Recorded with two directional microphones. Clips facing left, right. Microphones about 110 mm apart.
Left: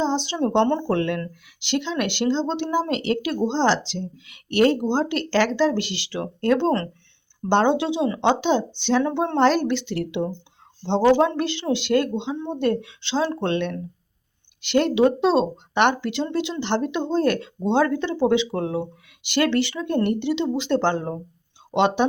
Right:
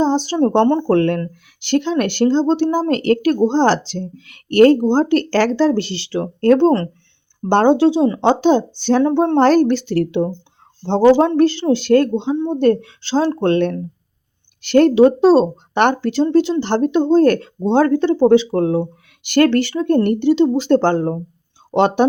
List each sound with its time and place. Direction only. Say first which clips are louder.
0.0 s speech: right 7 dB; 45° right (ahead or behind)